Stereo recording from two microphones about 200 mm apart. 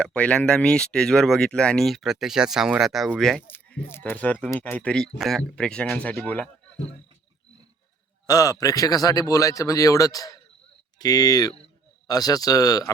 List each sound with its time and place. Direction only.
0.0 s speech: 5° left (ahead or behind)
8.3 s speech: 20° left (ahead or behind)